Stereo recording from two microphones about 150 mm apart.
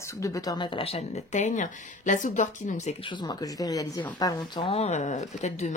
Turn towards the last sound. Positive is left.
turn(degrees=50)  # may be behind; listen again after turning